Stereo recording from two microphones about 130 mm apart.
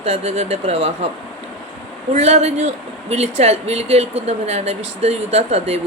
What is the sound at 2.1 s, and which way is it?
Speech, 60° right (ahead or behind).